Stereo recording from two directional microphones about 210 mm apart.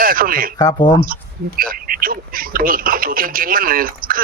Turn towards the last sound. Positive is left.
turn(degrees=-45)  # may be behind; listen again after turning